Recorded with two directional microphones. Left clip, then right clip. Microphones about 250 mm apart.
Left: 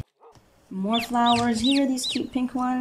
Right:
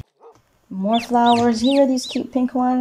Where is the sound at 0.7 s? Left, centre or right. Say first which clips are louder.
Right 4 dB; right.